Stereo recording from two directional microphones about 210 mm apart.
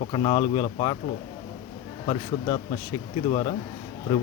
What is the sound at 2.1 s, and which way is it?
Speech, 20° left (ahead or behind).